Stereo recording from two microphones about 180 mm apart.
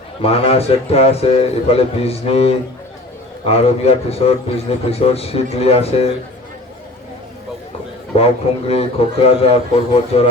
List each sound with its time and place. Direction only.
0.2 s speech: 35° left (ahead or behind)
8.1 s speech: 35° left (ahead or behind)